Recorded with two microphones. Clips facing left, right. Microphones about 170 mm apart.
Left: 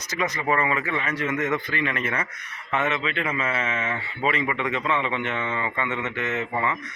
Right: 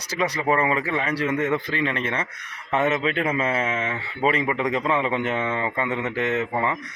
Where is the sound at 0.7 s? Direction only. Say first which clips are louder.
Right 3 dB; 35° right (ahead or behind).